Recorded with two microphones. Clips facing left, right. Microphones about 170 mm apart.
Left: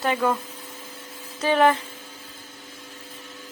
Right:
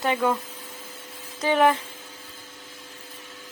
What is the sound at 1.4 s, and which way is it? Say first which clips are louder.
Speech: left 1 dB; 15° right (ahead or behind).